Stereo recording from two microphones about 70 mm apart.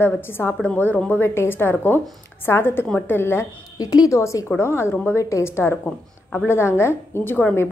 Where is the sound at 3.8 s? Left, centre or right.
Left.